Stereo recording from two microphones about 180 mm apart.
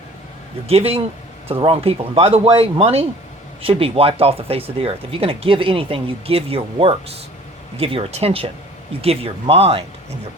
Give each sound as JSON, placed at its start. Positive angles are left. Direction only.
{"t": 0.7, "sound": "speech", "side_deg": -30}